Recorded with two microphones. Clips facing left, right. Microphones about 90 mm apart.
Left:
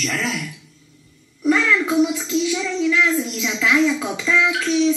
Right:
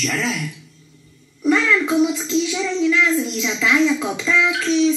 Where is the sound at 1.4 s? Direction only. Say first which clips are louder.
Right 1 dB; centre (ahead or behind).